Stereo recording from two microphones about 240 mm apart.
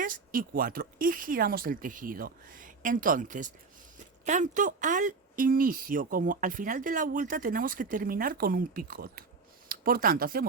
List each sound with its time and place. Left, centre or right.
0.0 s speech: right